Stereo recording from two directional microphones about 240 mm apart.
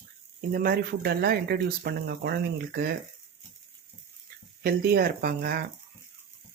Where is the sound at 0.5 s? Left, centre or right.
Right.